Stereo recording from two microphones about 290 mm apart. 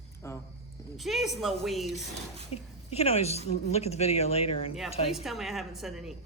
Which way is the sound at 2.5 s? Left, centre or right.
Left.